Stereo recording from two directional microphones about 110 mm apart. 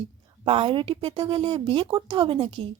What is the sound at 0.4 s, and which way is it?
A woman's voice, 55° right (ahead or behind).